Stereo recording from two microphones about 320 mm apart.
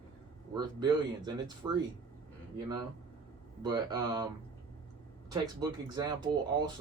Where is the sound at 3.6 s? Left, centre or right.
Centre.